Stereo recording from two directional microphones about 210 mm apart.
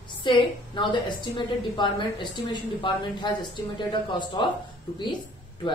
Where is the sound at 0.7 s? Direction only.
20° left (ahead or behind).